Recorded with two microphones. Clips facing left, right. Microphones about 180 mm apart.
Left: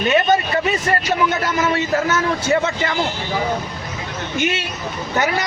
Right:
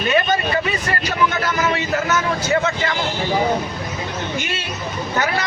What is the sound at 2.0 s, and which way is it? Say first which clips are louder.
Speech: left 2 dB; 30° left (ahead or behind).